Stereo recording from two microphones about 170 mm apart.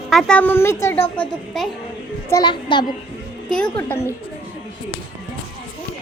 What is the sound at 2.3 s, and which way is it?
Speech, 25° left (ahead or behind).